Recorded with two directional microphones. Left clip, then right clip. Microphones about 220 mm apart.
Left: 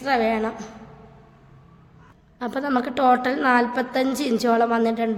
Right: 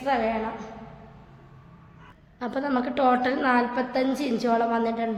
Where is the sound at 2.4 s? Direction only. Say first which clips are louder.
Left 3 dB; 25° left (ahead or behind).